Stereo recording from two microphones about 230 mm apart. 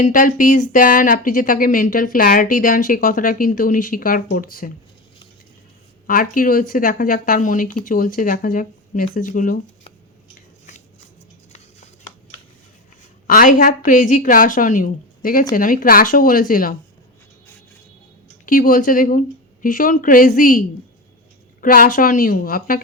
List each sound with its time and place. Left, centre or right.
0.0 s speech: left
6.1 s speech: left
13.2 s speech: left
18.4 s speech: left